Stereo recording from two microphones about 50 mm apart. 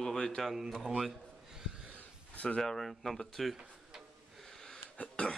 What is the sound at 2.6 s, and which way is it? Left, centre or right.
Speech, centre.